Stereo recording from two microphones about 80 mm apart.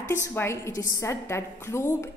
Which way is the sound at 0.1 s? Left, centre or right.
Left.